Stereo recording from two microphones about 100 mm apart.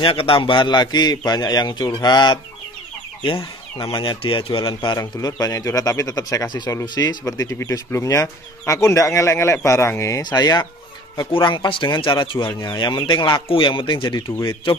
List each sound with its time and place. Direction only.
0.0 s a man's voice: 65° left (ahead or behind); by 2.4 s 50° left (ahead or behind)
3.7 s a man's voice: 45° left (ahead or behind); by 4.9 s 60° left (ahead or behind)
4.9 s speech: 35° left (ahead or behind)
11.4 s a man's voice: 50° left (ahead or behind)